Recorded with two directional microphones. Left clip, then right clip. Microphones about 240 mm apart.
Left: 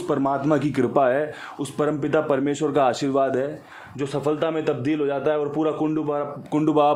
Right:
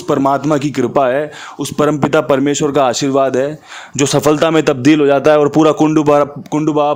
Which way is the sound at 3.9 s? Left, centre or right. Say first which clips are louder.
Right 12 dB; right.